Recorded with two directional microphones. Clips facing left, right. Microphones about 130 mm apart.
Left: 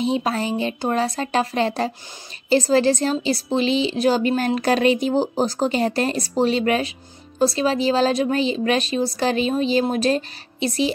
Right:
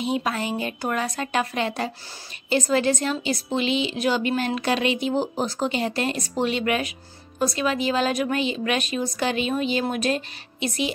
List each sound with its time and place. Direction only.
0.0 s a woman's voice: 30° left (ahead or behind)